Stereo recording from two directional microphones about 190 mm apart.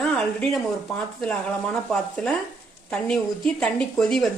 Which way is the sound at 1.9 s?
5° left (ahead or behind).